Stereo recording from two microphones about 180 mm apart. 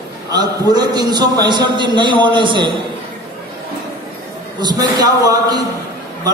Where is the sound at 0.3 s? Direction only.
20° right (ahead or behind).